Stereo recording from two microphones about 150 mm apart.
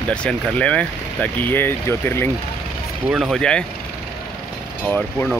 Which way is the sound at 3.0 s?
5° right (ahead or behind).